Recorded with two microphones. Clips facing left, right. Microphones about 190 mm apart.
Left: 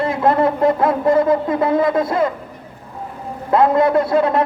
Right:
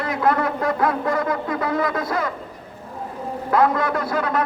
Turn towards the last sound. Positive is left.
turn(degrees=25)  # may be behind; listen again after turning